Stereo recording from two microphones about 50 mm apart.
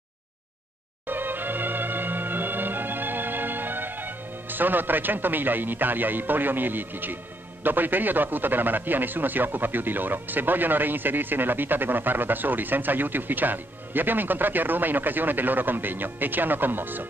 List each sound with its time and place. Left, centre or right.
1.0 s music: right
7.6 s speech: right